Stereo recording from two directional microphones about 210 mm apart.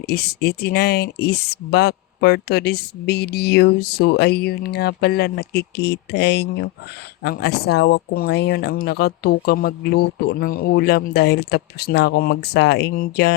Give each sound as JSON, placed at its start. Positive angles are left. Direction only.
{"t": 0.1, "sound": "speech", "side_deg": 50}